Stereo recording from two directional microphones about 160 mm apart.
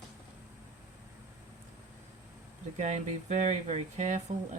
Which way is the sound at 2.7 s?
45° right (ahead or behind).